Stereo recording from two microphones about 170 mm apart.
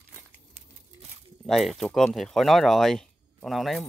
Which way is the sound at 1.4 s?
Centre (ahead or behind).